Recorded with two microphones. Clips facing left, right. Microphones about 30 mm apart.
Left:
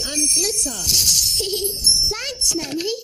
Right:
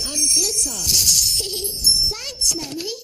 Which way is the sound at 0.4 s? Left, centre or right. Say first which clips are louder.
Even; left.